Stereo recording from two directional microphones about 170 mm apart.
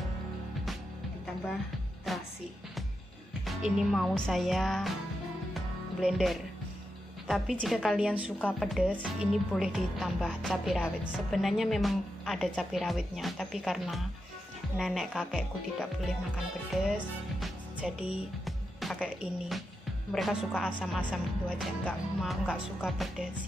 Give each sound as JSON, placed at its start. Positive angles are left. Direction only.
{"t": 2.1, "sound": "music", "side_deg": 0}
{"t": 3.4, "sound": "music", "side_deg": 0}
{"t": 16.7, "sound": "speech", "side_deg": 0}
{"t": 20.1, "sound": "music", "side_deg": 0}